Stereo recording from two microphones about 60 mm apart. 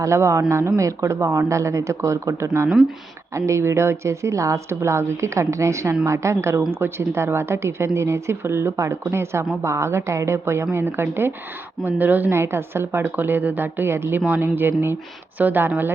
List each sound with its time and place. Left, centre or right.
0.0 s speech: right
4.7 s a woman's voice: right
12.3 s a woman's voice: right